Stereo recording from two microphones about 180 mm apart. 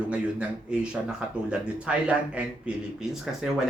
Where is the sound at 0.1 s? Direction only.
5° right (ahead or behind).